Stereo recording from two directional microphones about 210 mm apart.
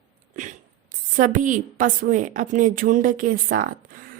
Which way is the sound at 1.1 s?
40° right (ahead or behind).